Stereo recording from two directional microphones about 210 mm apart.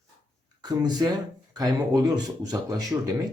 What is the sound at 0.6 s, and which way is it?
Speech, 20° right (ahead or behind).